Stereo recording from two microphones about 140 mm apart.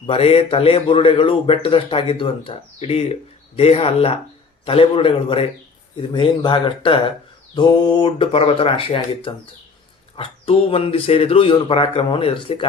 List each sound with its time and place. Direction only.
0.1 s speech: 45° left (ahead or behind)